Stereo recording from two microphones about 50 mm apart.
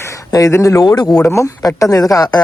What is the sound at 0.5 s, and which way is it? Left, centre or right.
Speech, left.